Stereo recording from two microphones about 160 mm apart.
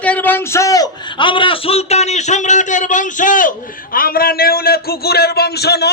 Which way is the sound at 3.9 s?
65° left (ahead or behind).